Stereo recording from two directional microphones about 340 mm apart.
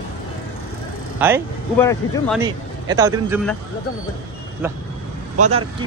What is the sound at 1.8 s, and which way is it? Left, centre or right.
Speech, centre.